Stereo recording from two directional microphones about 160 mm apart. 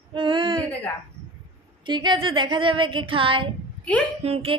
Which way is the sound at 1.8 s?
30° right (ahead or behind).